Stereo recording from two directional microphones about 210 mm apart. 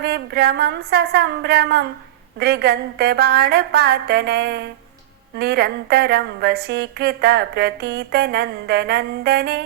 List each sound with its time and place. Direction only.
0.0 s a woman's voice: 50° right (ahead or behind)